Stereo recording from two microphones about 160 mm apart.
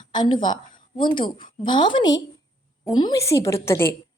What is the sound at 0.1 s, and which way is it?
A woman's voice, 30° left (ahead or behind).